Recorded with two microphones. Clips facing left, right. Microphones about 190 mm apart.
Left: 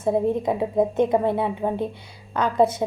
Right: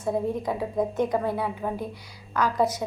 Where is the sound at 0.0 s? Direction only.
25° left (ahead or behind).